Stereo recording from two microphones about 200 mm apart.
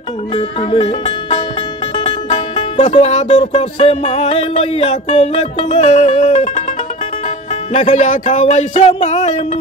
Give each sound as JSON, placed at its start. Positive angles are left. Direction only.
{"t": 0.3, "sound": "speech", "side_deg": 25}
{"t": 2.0, "sound": "music", "side_deg": 30}
{"t": 7.7, "sound": "speech", "side_deg": 35}